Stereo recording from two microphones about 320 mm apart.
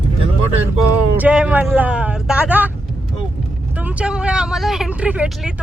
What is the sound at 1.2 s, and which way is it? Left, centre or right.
Speech, centre.